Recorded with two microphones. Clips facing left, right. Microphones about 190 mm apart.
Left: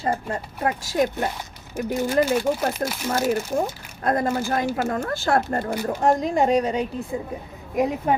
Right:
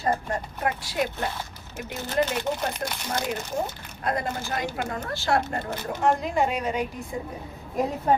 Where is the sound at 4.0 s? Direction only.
45° left (ahead or behind).